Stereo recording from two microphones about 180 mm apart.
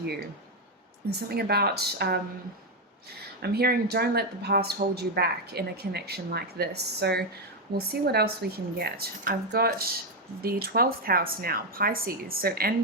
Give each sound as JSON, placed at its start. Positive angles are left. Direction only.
{"t": 1.3, "sound": "speech", "side_deg": -60}